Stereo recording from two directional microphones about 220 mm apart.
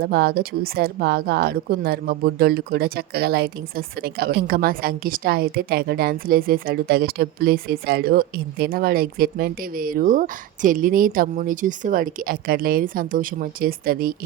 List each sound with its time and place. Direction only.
0.0 s a woman's voice: 45° right (ahead or behind)